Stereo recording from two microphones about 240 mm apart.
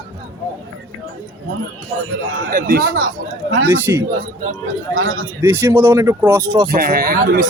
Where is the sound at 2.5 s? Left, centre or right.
Right.